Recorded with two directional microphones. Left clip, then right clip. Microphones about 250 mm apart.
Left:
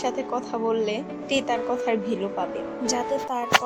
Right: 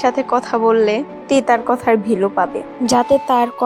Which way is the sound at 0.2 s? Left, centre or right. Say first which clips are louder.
Right 11 dB; centre.